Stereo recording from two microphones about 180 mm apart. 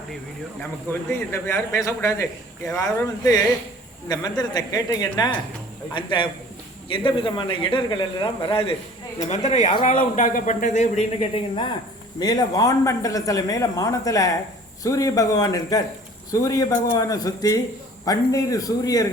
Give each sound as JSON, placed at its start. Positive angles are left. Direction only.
{"t": 0.6, "sound": "a man's voice", "side_deg": 15}